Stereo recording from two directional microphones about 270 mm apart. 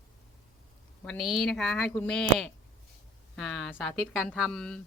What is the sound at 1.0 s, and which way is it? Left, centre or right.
Speech, centre.